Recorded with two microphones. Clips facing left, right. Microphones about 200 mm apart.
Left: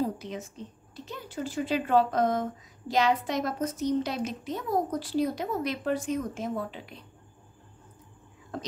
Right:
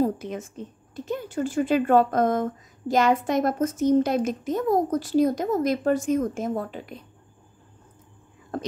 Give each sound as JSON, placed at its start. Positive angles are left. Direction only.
{"t": 0.0, "sound": "a woman's voice", "side_deg": -50}
{"t": 8.5, "sound": "speech", "side_deg": -50}